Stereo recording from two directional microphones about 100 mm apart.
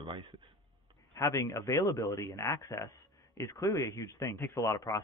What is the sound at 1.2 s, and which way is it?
Speech, 30° left (ahead or behind).